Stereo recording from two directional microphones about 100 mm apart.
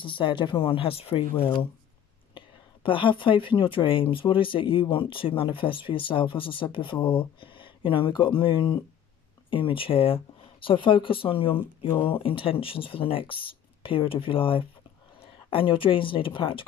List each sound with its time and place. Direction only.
0.0 s speech: 55° left (ahead or behind)
2.3 s speech: 55° left (ahead or behind)